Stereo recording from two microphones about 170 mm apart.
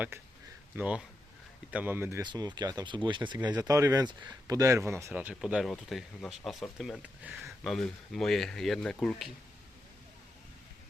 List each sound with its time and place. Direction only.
0.1 s speech: 15° right (ahead or behind)
2.2 s speech: 25° right (ahead or behind); by 9.3 s centre (ahead or behind)